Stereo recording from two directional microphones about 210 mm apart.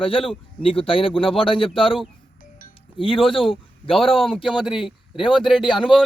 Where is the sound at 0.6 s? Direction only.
25° left (ahead or behind).